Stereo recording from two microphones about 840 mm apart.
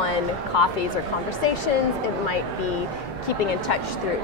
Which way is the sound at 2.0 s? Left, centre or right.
Left.